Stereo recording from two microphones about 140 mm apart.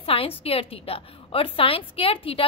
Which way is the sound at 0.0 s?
40° left (ahead or behind).